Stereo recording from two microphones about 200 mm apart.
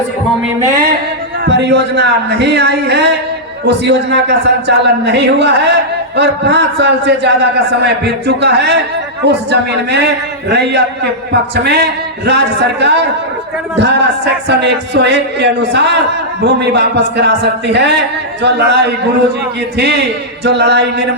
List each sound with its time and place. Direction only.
1.5 s a man's voice: 60° right (ahead or behind)
20.4 s a man's voice: 60° right (ahead or behind)